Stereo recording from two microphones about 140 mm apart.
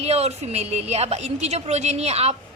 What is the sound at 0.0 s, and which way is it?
A woman's voice, 50° right (ahead or behind).